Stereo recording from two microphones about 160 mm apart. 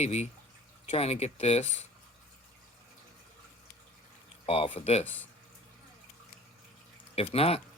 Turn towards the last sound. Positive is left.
turn(degrees=35)  # may be behind; listen again after turning